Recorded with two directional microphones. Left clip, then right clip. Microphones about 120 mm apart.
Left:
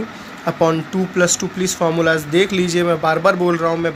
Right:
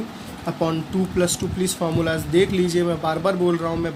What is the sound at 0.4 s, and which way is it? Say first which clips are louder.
Speech: left 8 dB; 50° left (ahead or behind).